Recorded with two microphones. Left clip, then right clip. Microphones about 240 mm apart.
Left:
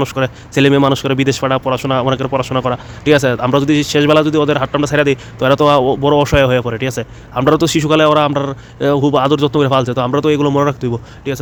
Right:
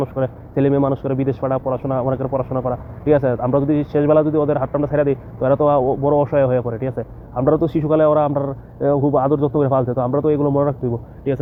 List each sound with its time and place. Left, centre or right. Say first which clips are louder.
0.0 s speech: left 5 dB; left